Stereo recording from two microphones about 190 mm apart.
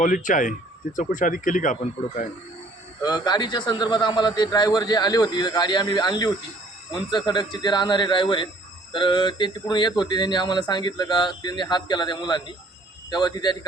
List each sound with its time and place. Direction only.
0.0 s speech: 45° left (ahead or behind)
3.0 s speech: 20° left (ahead or behind)